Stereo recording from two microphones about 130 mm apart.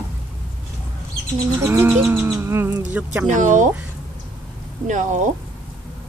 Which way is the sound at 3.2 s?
75° right (ahead or behind).